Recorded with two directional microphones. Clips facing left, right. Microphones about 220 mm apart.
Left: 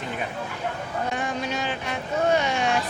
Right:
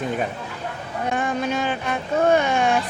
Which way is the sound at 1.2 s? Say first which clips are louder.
Right 5 dB; 50° right (ahead or behind).